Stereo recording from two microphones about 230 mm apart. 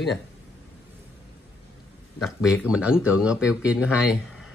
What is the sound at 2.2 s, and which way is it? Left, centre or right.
Speech, centre.